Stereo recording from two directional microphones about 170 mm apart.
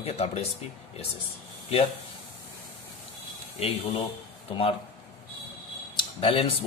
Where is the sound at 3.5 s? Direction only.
30° left (ahead or behind).